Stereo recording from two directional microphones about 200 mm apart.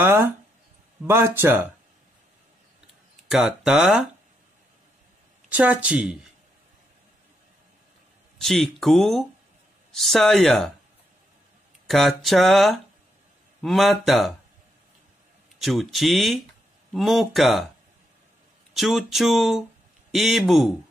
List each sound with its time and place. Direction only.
0.0 s a sound: 10° right (ahead or behind)
1.0 s speech: 10° right (ahead or behind)
3.3 s speech: centre (ahead or behind)
5.5 s speech: 5° right (ahead or behind)
8.4 s speech: centre (ahead or behind)
11.9 s speech: centre (ahead or behind)
15.6 s speech: centre (ahead or behind)
18.8 s speech: centre (ahead or behind)